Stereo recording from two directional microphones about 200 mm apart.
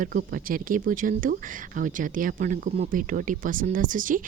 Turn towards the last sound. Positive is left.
turn(degrees=-40)  # may be behind; listen again after turning